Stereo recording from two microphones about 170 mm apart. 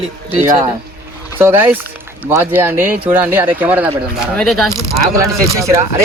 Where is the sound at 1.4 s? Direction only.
10° right (ahead or behind).